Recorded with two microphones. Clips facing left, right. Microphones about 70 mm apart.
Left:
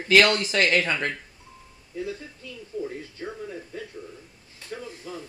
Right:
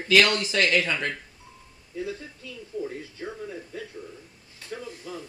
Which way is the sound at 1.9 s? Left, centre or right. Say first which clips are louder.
Even; centre.